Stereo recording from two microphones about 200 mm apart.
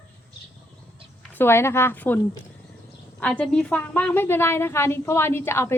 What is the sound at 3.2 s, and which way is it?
A woman's voice, 5° left (ahead or behind).